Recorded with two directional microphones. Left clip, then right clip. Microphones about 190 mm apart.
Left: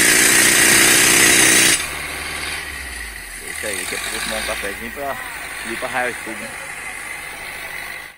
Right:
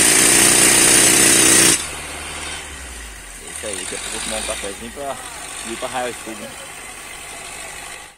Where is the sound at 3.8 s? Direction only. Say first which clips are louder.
Left 3 dB; 70° right (ahead or behind).